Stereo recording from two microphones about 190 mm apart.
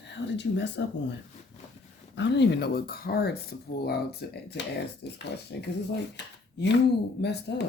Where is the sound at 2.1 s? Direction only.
65° left (ahead or behind).